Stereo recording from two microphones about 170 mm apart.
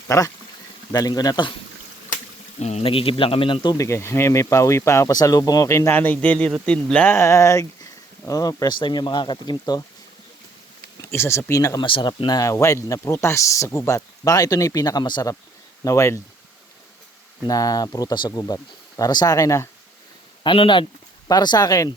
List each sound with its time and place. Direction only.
0.1 s speech: 20° left (ahead or behind)
2.6 s speech: 40° left (ahead or behind); by 9.8 s 25° left (ahead or behind)
11.1 s speech: 15° left (ahead or behind)
11.9 s speech: 30° left (ahead or behind)
17.4 s speech: 20° left (ahead or behind)
20.4 s speech: 30° left (ahead or behind)